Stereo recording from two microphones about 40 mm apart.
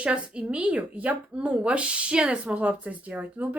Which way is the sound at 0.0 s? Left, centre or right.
Right.